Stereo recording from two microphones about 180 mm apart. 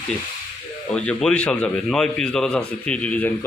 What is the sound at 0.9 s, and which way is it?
A man's voice, 5° left (ahead or behind).